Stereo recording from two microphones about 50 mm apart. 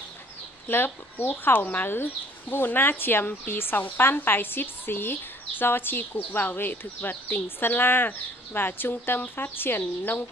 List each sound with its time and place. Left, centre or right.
0.7 s a woman's voice: left